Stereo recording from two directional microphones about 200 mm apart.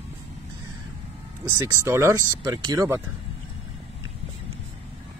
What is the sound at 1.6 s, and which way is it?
Speech, 15° right (ahead or behind).